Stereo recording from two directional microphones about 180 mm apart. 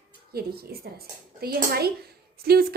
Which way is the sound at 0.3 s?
60° right (ahead or behind).